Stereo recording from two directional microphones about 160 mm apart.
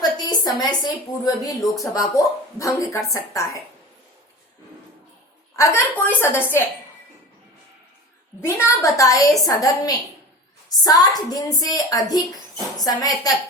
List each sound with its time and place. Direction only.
0.0 s a woman's voice: 25° left (ahead or behind)
5.5 s a woman's voice: 15° left (ahead or behind)
8.4 s speech: 15° left (ahead or behind)